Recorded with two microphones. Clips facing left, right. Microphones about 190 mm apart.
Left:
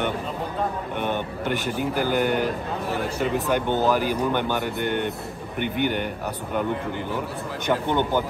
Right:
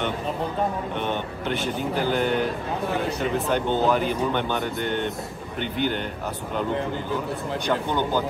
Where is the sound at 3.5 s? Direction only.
15° left (ahead or behind).